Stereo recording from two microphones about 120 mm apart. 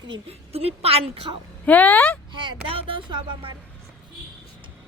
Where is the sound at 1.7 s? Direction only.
15° left (ahead or behind).